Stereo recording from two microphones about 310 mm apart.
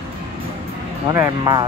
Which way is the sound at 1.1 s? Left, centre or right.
Centre.